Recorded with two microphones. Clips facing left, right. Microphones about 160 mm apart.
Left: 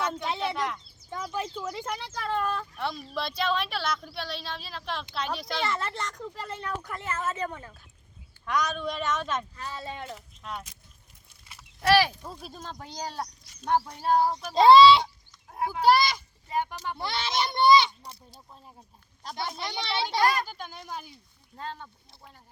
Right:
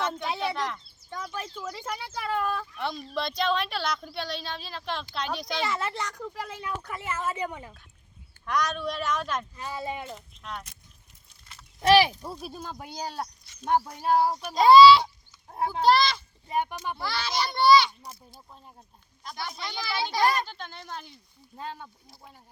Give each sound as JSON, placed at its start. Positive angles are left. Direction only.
{"t": 0.2, "sound": "speech", "side_deg": 0}
{"t": 8.4, "sound": "speech", "side_deg": 0}
{"t": 9.6, "sound": "speech", "side_deg": -15}
{"t": 10.1, "sound": "speech", "side_deg": 5}
{"t": 11.8, "sound": "speech", "side_deg": -15}
{"t": 14.5, "sound": "a child's voice", "side_deg": 25}
{"t": 15.8, "sound": "speech", "side_deg": 10}
{"t": 16.5, "sound": "speech", "side_deg": -15}
{"t": 17.0, "sound": "a child's voice", "side_deg": 25}
{"t": 18.3, "sound": "speech", "side_deg": 0}
{"t": 19.2, "sound": "a child's voice", "side_deg": 25}
{"t": 20.5, "sound": "speech", "side_deg": 10}
{"t": 21.5, "sound": "speech", "side_deg": -15}